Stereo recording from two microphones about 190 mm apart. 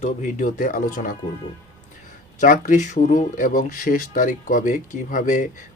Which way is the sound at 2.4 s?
45° left (ahead or behind).